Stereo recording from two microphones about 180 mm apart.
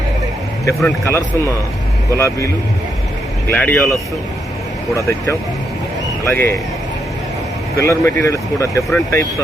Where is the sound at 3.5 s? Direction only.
10° left (ahead or behind).